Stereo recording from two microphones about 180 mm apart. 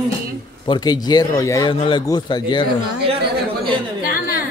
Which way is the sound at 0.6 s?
25° left (ahead or behind).